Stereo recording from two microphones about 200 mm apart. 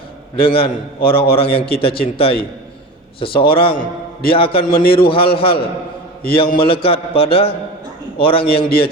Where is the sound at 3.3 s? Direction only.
50° left (ahead or behind).